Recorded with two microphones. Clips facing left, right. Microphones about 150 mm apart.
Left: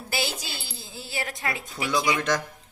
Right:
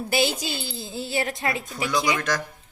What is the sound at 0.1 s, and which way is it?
A woman's voice, 20° right (ahead or behind).